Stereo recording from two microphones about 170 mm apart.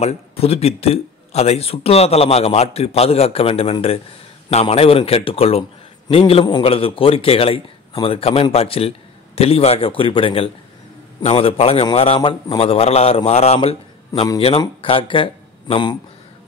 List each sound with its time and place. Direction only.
0.0 s speech: 35° left (ahead or behind)